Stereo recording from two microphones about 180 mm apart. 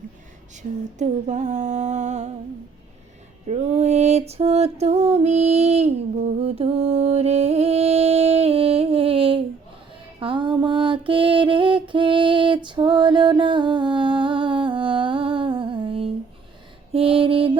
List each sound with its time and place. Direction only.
0.5 s music: 40° right (ahead or behind)
3.4 s music: 40° right (ahead or behind)
10.2 s mantra: 30° right (ahead or behind)